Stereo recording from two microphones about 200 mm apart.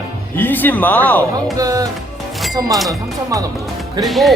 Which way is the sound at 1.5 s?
15° right (ahead or behind).